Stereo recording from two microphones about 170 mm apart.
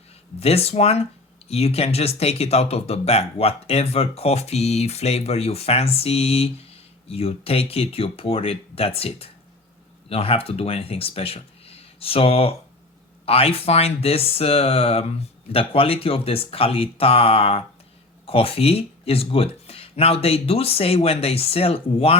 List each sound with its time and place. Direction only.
0.3 s speech: 35° left (ahead or behind)